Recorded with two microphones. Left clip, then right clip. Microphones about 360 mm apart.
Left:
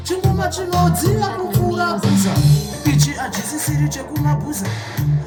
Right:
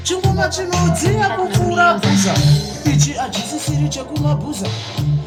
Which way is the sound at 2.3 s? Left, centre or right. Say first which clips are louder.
Right 2 dB; left.